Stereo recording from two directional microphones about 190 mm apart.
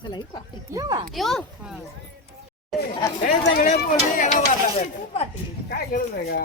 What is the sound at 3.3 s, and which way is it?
Speech, 45° left (ahead or behind).